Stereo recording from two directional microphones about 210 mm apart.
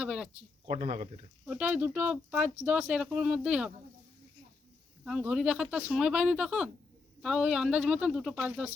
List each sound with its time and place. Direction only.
0.0 s a sound: 5° right (ahead or behind)
0.7 s speech: 30° right (ahead or behind)
1.5 s speech: 5° right (ahead or behind)
5.0 s speech: 5° right (ahead or behind)